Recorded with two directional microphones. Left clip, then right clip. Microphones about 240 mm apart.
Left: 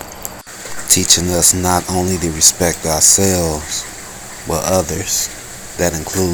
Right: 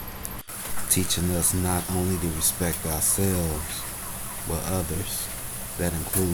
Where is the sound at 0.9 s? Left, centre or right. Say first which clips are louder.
Left 14 dB; left.